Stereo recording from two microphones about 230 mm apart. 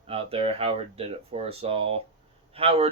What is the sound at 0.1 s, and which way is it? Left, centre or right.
Speech, right.